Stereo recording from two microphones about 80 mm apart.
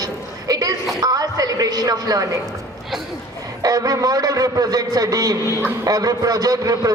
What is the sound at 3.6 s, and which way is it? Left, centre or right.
A man's voice, right.